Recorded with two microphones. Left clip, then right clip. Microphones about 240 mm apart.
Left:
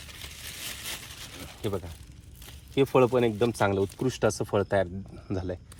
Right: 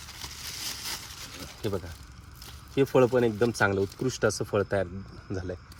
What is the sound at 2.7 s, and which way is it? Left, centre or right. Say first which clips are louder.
Speech: even; centre.